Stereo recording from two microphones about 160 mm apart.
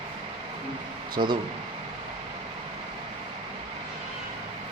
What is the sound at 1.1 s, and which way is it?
Speech, 25° right (ahead or behind).